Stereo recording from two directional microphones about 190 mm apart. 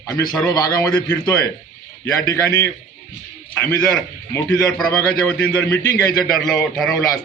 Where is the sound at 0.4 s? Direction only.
20° left (ahead or behind); by 6.9 s 5° left (ahead or behind).